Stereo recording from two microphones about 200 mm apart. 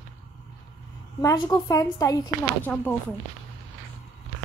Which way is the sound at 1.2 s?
20° left (ahead or behind).